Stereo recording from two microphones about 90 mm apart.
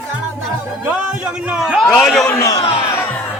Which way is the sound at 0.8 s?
10° right (ahead or behind).